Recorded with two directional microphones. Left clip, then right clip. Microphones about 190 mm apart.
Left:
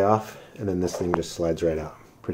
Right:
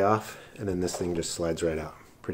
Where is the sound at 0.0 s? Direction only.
Centre (ahead or behind).